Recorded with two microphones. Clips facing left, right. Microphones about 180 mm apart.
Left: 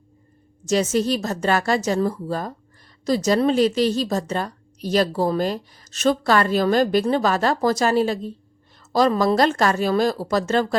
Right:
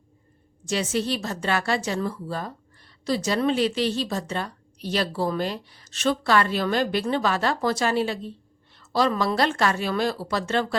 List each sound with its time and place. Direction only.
0.6 s a woman's voice: 40° left (ahead or behind)